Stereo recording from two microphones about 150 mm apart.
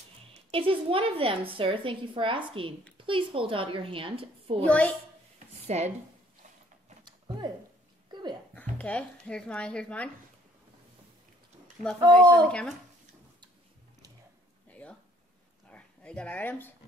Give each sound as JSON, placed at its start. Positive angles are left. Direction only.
{"t": 0.5, "sound": "a woman's voice", "side_deg": -40}
{"t": 4.6, "sound": "speech", "side_deg": 10}
{"t": 5.7, "sound": "speech", "side_deg": -45}
{"t": 7.1, "sound": "a sound", "side_deg": -30}
{"t": 8.5, "sound": "speech", "side_deg": 10}
{"t": 12.1, "sound": "speech", "side_deg": 5}
{"t": 14.7, "sound": "a sound", "side_deg": 10}